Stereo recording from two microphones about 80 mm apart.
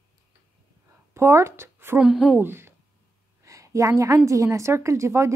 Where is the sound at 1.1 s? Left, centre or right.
Right.